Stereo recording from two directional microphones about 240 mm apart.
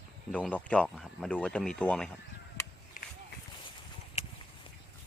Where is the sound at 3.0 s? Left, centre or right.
Left.